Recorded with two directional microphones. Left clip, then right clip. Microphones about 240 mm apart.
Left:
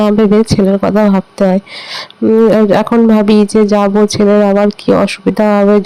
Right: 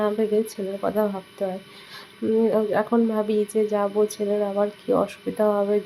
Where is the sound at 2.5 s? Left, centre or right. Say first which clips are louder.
Left 12 dB; left.